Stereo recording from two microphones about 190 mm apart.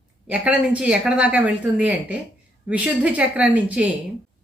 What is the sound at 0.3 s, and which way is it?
A woman's voice, 5° right (ahead or behind).